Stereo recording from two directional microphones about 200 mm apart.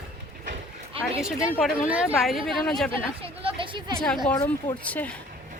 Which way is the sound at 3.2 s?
25° right (ahead or behind).